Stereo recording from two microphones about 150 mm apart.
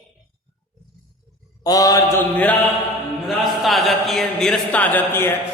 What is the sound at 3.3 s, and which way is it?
Speech, centre (ahead or behind).